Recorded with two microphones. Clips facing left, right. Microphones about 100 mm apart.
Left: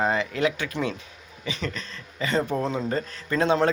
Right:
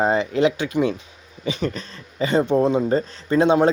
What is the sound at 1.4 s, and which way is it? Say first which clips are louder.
Speech: right 7 dB; 35° right (ahead or behind).